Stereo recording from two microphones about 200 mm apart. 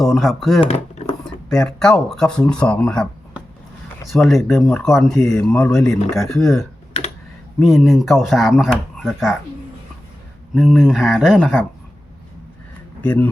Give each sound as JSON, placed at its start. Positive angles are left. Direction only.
{"t": 0.0, "sound": "speech", "side_deg": 0}
{"t": 0.7, "sound": "a sound", "side_deg": 30}
{"t": 1.5, "sound": "speech", "side_deg": 5}
{"t": 10.5, "sound": "speech", "side_deg": 0}
{"t": 13.0, "sound": "speech", "side_deg": 10}